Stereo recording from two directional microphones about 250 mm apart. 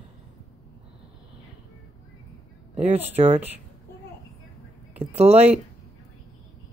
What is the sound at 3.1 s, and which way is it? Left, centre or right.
Speech, right.